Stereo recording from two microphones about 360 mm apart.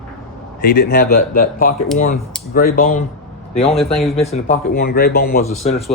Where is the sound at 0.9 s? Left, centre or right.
Left.